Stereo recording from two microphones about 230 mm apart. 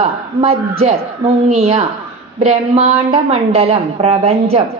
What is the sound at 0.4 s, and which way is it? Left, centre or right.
Speech, right.